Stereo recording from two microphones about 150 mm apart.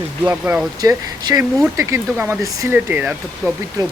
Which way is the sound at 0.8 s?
25° right (ahead or behind).